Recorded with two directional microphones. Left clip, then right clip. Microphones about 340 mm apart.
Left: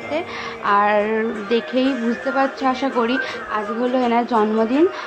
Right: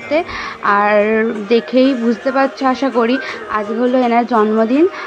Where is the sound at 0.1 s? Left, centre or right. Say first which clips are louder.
Right 9 dB; centre.